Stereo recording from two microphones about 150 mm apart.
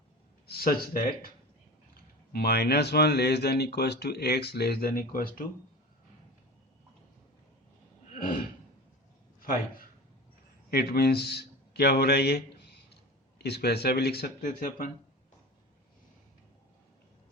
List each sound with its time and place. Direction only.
0.4 s speech: 85° left
2.3 s speech: 90° left; by 5.5 s 75° left (ahead or behind)
10.7 s a man's voice: 90° left
14.4 s speech: 65° left (ahead or behind)